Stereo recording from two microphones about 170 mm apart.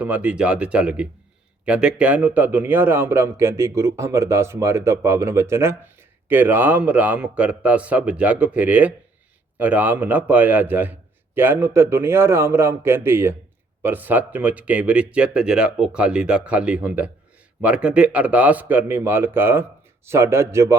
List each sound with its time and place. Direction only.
0.0 s a man's voice: 10° right (ahead or behind)